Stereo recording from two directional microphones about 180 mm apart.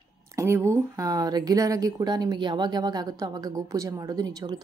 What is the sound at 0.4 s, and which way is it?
Speech, 15° right (ahead or behind).